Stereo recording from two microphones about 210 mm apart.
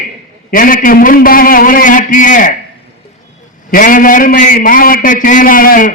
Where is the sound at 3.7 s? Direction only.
40° left (ahead or behind).